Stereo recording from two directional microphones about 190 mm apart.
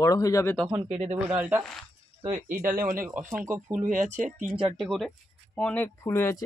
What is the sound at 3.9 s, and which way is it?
Speech, 45° right (ahead or behind).